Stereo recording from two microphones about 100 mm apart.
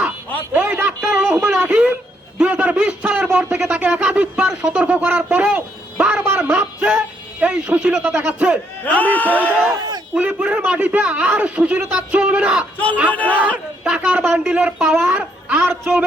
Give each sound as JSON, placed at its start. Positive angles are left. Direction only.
{"t": 0.5, "sound": "a sound", "side_deg": -15}
{"t": 2.4, "sound": "speech", "side_deg": -15}
{"t": 4.6, "sound": "a sound", "side_deg": -10}
{"t": 6.5, "sound": "music", "side_deg": -15}
{"t": 8.3, "sound": "a man's voice", "side_deg": -10}
{"t": 8.8, "sound": "speech", "side_deg": 15}
{"t": 10.2, "sound": "a man's voice", "side_deg": -15}
{"t": 12.7, "sound": "a man's voice", "side_deg": 15}
{"t": 13.8, "sound": "a man's voice", "side_deg": -10}
{"t": 15.2, "sound": "a sound", "side_deg": -10}
{"t": 15.7, "sound": "a man's voice", "side_deg": -25}